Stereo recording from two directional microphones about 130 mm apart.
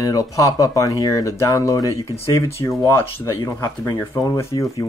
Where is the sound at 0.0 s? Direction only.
25° left (ahead or behind).